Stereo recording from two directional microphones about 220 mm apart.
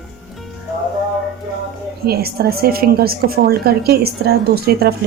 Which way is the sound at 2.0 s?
45° right (ahead or behind).